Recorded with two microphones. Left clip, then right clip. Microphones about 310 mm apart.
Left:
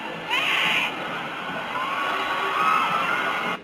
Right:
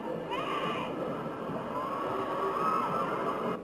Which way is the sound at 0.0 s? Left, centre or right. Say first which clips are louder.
Left 9 dB; centre.